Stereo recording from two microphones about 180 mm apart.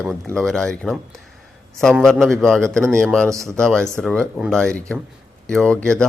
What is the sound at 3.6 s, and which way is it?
Speech, 5° left (ahead or behind).